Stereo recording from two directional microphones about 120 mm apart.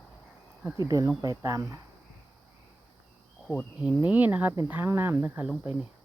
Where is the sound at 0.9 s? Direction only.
25° right (ahead or behind).